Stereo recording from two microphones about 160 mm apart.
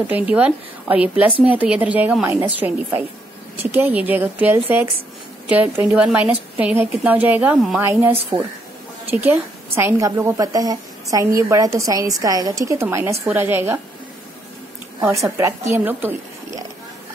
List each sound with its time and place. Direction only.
0.0 s a woman's voice: 10° right (ahead or behind)
15.0 s a woman's voice: 15° right (ahead or behind)